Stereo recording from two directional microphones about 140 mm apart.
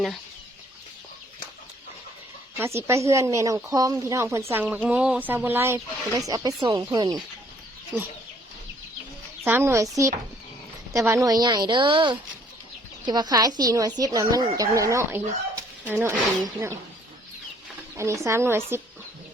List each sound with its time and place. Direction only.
2.6 s a woman's voice: 20° right (ahead or behind)
7.9 s speech: 10° right (ahead or behind)
9.4 s speech: 20° right (ahead or behind)
10.9 s a woman's voice: 20° right (ahead or behind)
17.9 s speech: 20° right (ahead or behind)